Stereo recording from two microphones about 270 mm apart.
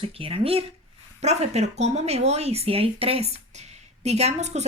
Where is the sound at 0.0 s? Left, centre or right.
Right.